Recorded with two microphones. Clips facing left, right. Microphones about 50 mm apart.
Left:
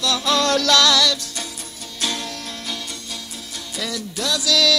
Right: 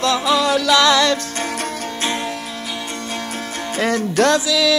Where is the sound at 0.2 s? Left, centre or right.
Centre.